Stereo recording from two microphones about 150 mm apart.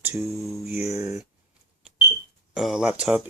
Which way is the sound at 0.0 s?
20° right (ahead or behind).